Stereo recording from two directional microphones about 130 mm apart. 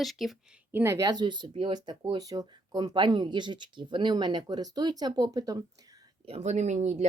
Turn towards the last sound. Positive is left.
turn(degrees=-60)  # may be behind; listen again after turning